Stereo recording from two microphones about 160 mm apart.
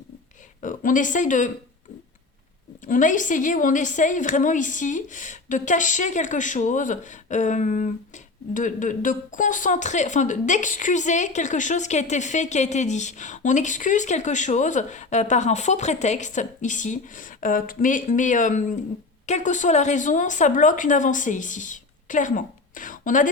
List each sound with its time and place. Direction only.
0.6 s a woman's voice: 55° left (ahead or behind)
2.8 s a woman's voice: 55° left (ahead or behind)